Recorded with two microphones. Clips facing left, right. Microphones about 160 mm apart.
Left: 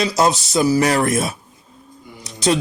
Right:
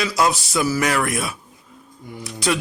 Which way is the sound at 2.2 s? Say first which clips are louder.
Left 4 dB; 20° left (ahead or behind).